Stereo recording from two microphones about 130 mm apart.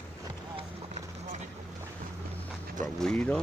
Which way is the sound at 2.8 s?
5° left (ahead or behind).